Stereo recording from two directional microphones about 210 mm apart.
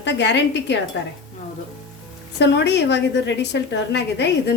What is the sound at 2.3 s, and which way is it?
A woman's voice, 55° left (ahead or behind).